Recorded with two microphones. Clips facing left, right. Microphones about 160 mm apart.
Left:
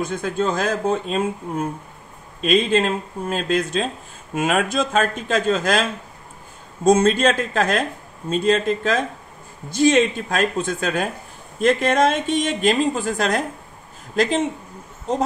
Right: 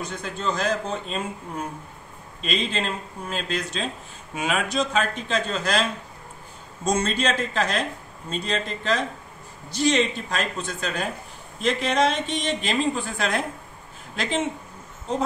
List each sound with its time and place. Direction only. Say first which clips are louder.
0.0 s a woman's voice: left 7 dB; 50° left (ahead or behind)